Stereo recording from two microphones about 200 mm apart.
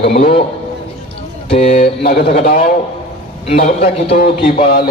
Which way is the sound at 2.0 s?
50° left (ahead or behind).